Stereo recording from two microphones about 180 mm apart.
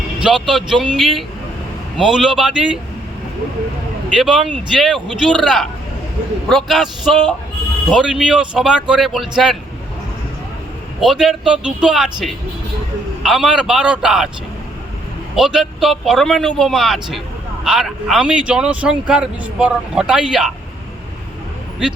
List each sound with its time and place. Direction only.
0.2 s speech: 5° right (ahead or behind)
4.2 s speech: centre (ahead or behind)
11.0 s speech: centre (ahead or behind)
13.2 s speech: 5° right (ahead or behind)
15.4 s speech: 5° right (ahead or behind)